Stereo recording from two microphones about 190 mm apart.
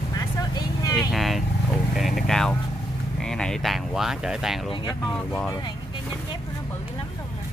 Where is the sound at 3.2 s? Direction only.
5° left (ahead or behind).